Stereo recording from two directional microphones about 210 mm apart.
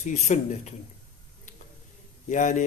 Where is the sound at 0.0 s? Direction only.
35° left (ahead or behind).